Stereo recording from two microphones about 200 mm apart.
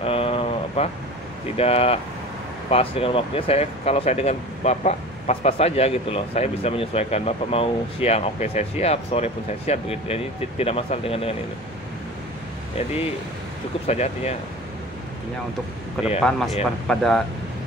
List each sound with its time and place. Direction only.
0.0 s a sound: 30° left (ahead or behind)
1.6 s speech: 30° left (ahead or behind)
13.8 s speech: 35° left (ahead or behind)
16.2 s speech: centre (ahead or behind)